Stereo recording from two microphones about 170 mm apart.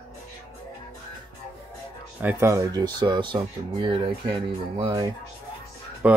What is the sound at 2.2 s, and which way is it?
Speech, 10° right (ahead or behind).